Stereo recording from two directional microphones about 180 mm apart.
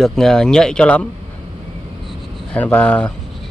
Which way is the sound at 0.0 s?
5° left (ahead or behind).